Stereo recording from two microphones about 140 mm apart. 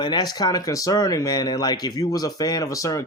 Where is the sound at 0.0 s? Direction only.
30° left (ahead or behind).